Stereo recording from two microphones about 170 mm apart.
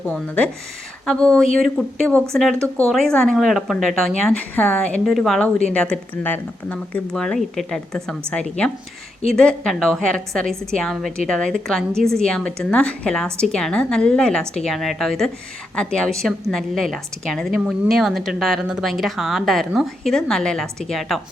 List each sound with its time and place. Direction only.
0.0 s a woman's voice: 5° left (ahead or behind)